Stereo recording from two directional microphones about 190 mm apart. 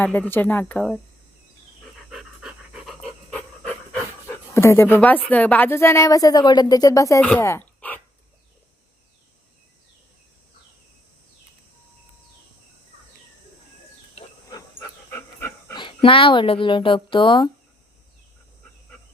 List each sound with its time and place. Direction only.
0.0 s speech: 10° left (ahead or behind)
2.0 s pant: 5° right (ahead or behind); by 7.2 s 15° left (ahead or behind)
7.2 s a sound: 10° left (ahead or behind)
14.5 s dog: 10° left (ahead or behind)
15.7 s speech: 25° left (ahead or behind)